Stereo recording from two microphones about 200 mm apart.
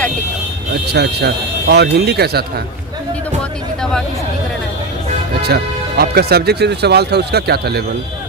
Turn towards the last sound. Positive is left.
turn(degrees=-55)  # may be behind; listen again after turning